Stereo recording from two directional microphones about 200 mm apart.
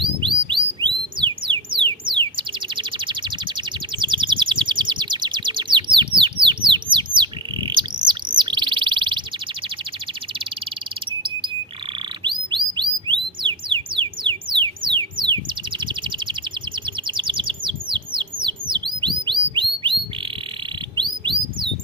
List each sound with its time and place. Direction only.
0.0 s bird: 25° right (ahead or behind)
12.2 s chirp: 25° right (ahead or behind)
15.8 s bird: 25° right (ahead or behind)
20.9 s a sound: 25° right (ahead or behind)